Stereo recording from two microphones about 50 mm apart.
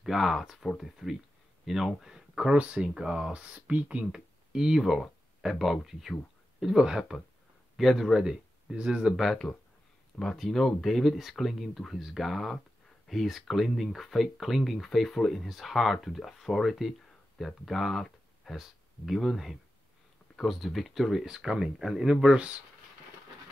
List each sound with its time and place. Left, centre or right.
0.0 s speech: centre
2.5 s speech: right
4.0 s speech: centre
7.7 s speech: centre
8.2 s speech: centre
9.1 s speech: centre
22.0 s speech: centre